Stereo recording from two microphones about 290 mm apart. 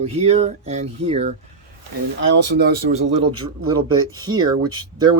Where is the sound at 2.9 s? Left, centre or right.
Right.